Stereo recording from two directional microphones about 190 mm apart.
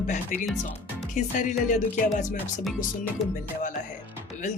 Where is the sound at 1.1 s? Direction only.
40° left (ahead or behind).